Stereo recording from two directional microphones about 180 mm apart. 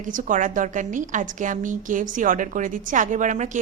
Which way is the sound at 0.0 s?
45° right (ahead or behind).